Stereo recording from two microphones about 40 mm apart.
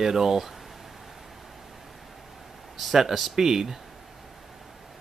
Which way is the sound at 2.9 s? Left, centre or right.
Centre.